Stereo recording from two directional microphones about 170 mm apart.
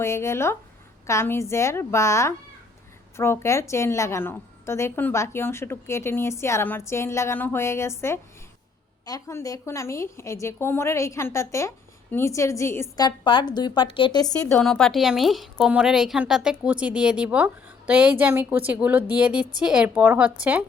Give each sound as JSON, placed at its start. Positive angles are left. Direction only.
{"t": 0.0, "sound": "a woman's voice", "side_deg": 15}
{"t": 14.6, "sound": "a woman's voice", "side_deg": 5}